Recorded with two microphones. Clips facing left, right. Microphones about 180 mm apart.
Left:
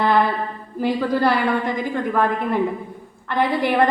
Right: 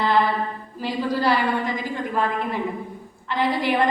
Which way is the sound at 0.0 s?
55° left (ahead or behind).